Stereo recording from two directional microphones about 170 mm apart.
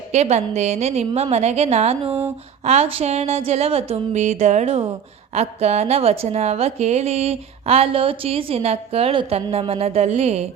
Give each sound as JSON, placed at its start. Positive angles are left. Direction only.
{"t": 0.1, "sound": "a woman's voice", "side_deg": -40}